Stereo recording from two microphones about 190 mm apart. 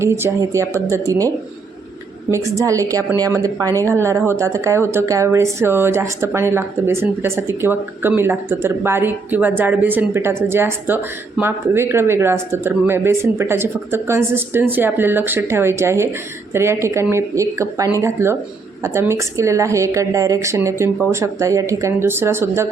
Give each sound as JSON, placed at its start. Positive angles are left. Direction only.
{"t": 0.0, "sound": "speech", "side_deg": -15}
{"t": 2.3, "sound": "speech", "side_deg": -15}